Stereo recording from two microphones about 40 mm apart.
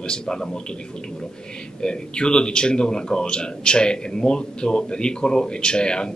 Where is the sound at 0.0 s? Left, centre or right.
Left.